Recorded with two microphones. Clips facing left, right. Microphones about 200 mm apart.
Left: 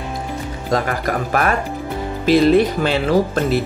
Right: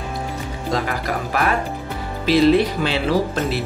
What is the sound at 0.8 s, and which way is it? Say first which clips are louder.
Speech: left 3 dB; 50° left (ahead or behind).